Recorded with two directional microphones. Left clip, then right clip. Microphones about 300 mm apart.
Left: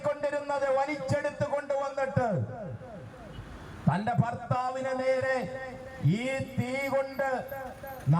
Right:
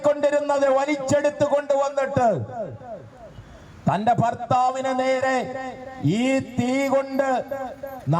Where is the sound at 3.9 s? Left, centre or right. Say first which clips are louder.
Right 10 dB; right.